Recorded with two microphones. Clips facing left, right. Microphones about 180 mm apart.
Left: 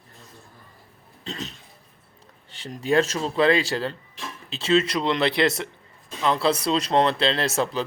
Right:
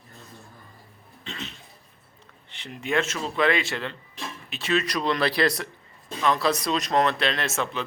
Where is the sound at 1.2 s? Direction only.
40° left (ahead or behind).